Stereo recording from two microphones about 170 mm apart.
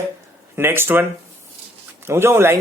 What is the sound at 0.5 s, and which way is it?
Speech, 15° right (ahead or behind).